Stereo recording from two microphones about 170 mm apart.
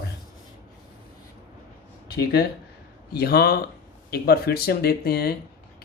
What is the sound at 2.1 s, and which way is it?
Speech, 70° left (ahead or behind).